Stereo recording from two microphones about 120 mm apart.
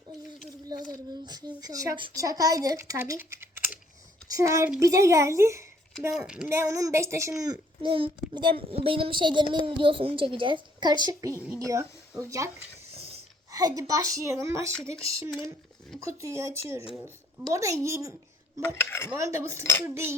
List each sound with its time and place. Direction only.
0.7 s a woman's voice: 35° right (ahead or behind)
6.1 s speech: 10° right (ahead or behind)
6.5 s a woman's voice: 25° right (ahead or behind)
7.4 s a child's voice: 40° right (ahead or behind)
13.5 s a woman's voice: 30° right (ahead or behind)
16.0 s a woman's voice: 25° right (ahead or behind)
16.9 s speech: centre (ahead or behind)
17.5 s a woman's voice: 25° right (ahead or behind)
18.6 s cutlery: 20° left (ahead or behind)
19.1 s a woman's voice: 25° right (ahead or behind)